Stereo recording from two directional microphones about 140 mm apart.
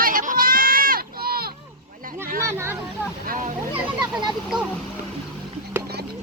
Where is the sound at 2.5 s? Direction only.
20° right (ahead or behind).